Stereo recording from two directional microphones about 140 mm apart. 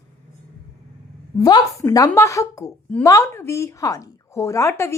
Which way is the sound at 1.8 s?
20° left (ahead or behind).